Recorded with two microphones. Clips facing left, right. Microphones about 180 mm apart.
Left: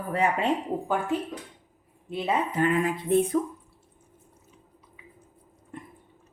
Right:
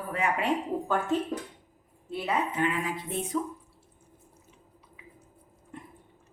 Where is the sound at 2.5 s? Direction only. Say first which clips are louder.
Left 5 dB; 45° left (ahead or behind).